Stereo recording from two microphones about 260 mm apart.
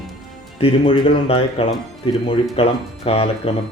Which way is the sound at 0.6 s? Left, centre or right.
Centre.